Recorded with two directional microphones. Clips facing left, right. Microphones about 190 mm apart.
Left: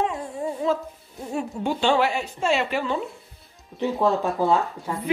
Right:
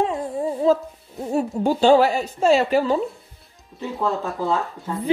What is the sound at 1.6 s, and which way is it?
A woman's voice, 40° right (ahead or behind).